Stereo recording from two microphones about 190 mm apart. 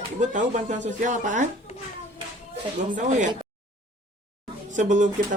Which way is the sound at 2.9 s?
40° right (ahead or behind).